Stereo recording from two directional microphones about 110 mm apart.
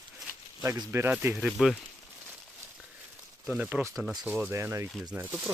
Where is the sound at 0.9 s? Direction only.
20° right (ahead or behind).